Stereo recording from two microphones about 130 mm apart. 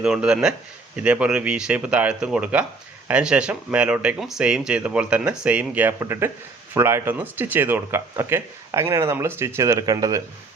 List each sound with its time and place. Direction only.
0.0 s speech: 5° right (ahead or behind); by 10.2 s 25° right (ahead or behind)